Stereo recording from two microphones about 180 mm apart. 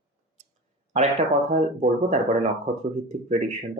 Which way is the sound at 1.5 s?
40° right (ahead or behind).